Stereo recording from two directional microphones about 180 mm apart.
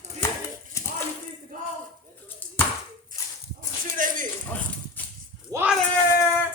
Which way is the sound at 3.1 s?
50° right (ahead or behind).